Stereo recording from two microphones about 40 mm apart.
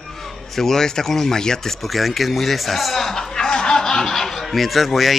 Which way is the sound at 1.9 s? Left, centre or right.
Centre.